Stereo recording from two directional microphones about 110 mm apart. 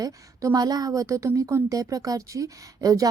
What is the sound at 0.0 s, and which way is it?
A woman's voice, 35° right (ahead or behind).